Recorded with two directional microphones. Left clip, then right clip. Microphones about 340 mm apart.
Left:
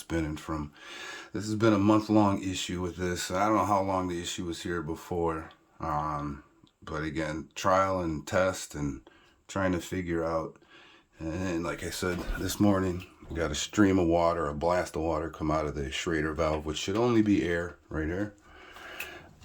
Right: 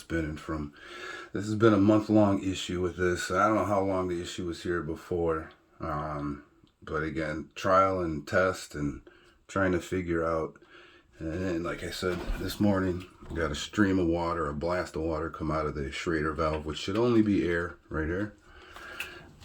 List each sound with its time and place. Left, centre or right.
0.1 s speech: centre
1.7 s speech: centre
2.0 s speech: centre